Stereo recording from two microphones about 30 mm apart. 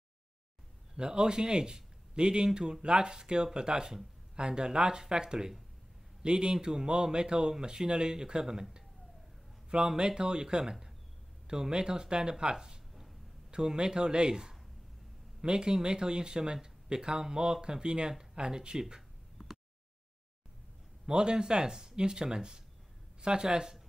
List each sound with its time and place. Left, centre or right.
0.9 s speech: right
9.9 s speech: right
21.0 s a man's voice: right